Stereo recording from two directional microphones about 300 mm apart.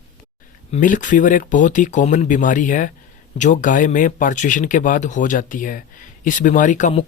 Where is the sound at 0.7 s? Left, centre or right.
Left.